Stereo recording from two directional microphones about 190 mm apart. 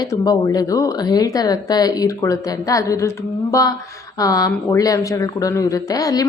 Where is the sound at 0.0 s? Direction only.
20° left (ahead or behind).